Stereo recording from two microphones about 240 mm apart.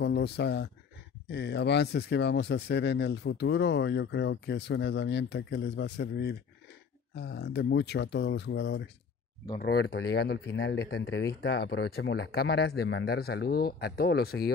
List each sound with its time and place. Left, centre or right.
0.0 s speech: left